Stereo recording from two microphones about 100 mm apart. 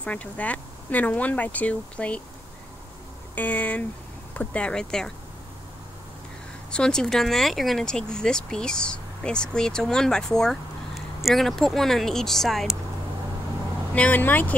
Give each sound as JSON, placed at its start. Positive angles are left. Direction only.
{"t": 0.0, "sound": "speech", "side_deg": 15}
{"t": 3.3, "sound": "speech", "side_deg": 15}
{"t": 6.7, "sound": "speech", "side_deg": 5}
{"t": 13.9, "sound": "speech", "side_deg": 15}